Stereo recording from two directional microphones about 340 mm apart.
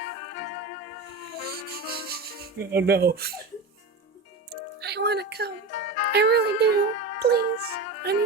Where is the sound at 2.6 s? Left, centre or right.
Right.